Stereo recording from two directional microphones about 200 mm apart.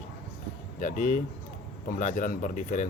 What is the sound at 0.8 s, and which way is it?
Speech, 40° left (ahead or behind).